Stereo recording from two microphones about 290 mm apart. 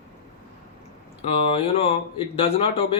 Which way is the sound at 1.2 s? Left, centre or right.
Centre.